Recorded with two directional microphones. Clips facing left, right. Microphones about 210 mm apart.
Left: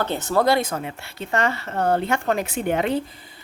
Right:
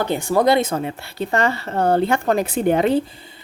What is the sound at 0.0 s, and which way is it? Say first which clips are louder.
Speech: right 3 dB; 15° right (ahead or behind).